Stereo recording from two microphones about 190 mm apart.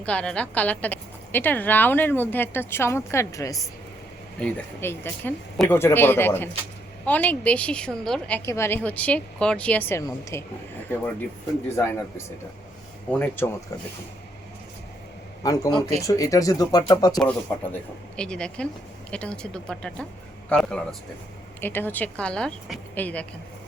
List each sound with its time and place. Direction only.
0.0 s a woman's voice: 5° left (ahead or behind)
11.8 s a woman's voice: 15° left (ahead or behind)
15.4 s a woman's voice: 20° left (ahead or behind)
17.2 s a woman's voice: 5° left (ahead or behind)